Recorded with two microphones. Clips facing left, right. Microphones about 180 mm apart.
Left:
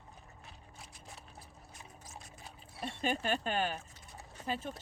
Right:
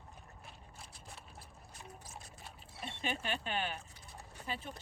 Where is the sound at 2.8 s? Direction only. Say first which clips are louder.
Left 5 dB; 40° left (ahead or behind).